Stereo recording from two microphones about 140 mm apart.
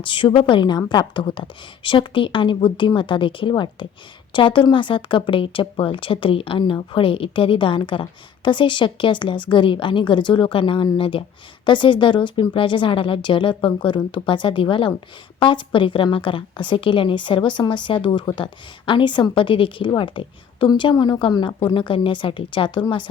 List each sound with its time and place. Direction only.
0.0 s a woman's voice: 35° left (ahead or behind)